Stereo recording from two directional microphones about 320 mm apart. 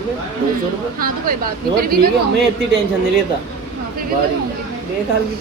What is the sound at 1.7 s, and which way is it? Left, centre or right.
Speech, right.